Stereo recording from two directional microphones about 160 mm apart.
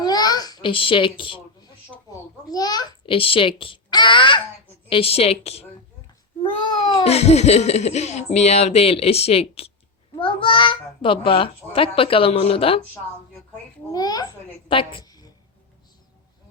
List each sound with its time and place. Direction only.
0.0 s babbling: 25° left (ahead or behind)
2.5 s a child's voice: 25° left (ahead or behind); by 5.6 s 40° left (ahead or behind)
7.0 s a child's voice: 40° left (ahead or behind)
13.9 s a child's voice: 25° left (ahead or behind)